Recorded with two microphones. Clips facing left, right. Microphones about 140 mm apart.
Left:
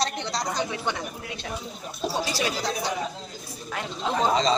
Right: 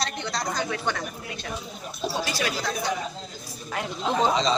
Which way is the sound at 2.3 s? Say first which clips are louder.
Left 1 dB; 30° left (ahead or behind).